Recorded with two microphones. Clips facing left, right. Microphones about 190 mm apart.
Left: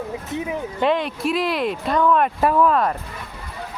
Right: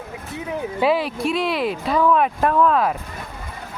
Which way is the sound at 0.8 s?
5° right (ahead or behind).